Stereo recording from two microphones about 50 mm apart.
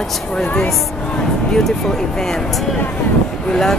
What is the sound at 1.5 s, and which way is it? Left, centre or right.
Speech, centre.